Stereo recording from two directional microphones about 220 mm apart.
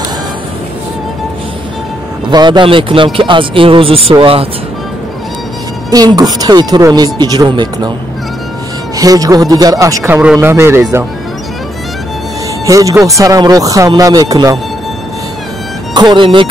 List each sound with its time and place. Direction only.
2.2 s speech: 20° right (ahead or behind)
5.9 s speech: 15° right (ahead or behind)
8.9 s speech: 15° right (ahead or behind)
12.6 s speech: 15° right (ahead or behind)
15.9 s speech: 20° right (ahead or behind)